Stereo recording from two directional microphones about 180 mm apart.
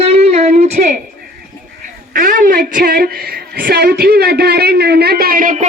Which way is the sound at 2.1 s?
50° right (ahead or behind).